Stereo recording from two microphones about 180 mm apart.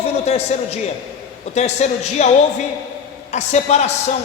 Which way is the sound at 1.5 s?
40° left (ahead or behind).